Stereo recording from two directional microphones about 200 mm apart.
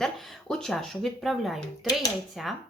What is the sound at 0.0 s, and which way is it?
Speech, centre (ahead or behind).